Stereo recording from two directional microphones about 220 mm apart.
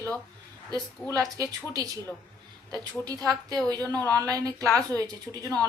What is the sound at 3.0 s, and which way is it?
Speech, 15° right (ahead or behind).